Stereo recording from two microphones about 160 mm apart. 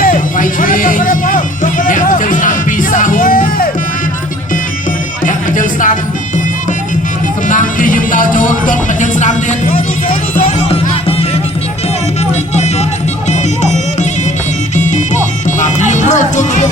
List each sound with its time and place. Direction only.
0.0 s music: 55° left (ahead or behind)
5.2 s music: 55° left (ahead or behind)
7.4 s music: 55° left (ahead or behind)
13.3 s music: 45° left (ahead or behind)